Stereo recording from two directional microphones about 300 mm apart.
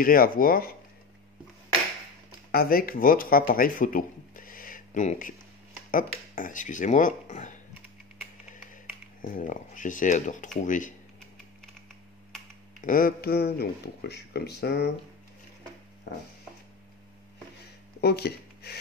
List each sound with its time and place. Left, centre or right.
0.0 s speech: left
2.5 s speech: left
9.2 s speech: left
12.8 s speech: left
18.0 s speech: left